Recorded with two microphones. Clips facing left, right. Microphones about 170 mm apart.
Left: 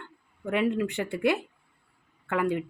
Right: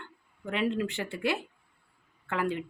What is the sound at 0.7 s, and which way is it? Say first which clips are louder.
Speech: left 3 dB; 15° left (ahead or behind).